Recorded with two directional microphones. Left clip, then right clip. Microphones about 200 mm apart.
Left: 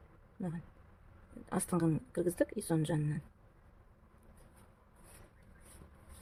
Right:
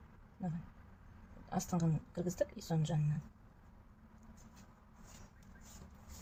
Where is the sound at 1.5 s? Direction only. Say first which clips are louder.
Left 5 dB; 40° left (ahead or behind).